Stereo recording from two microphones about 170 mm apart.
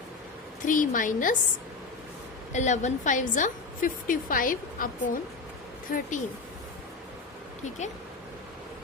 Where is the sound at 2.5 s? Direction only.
45° left (ahead or behind).